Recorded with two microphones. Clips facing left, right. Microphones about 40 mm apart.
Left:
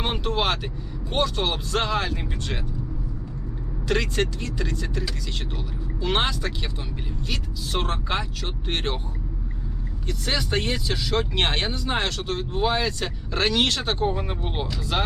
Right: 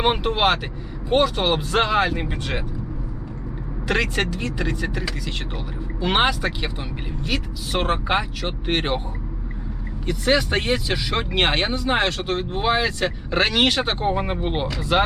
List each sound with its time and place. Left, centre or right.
0.2 s speech: centre
3.8 s speech: right
6.1 s speech: centre
7.8 s speech: right
10.1 s speech: right